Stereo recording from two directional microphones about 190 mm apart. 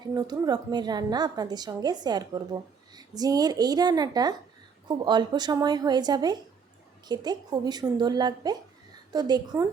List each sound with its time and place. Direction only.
0.1 s a woman's voice: 20° right (ahead or behind)